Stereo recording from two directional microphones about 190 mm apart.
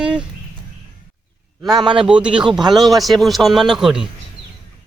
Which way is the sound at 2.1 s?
5° right (ahead or behind).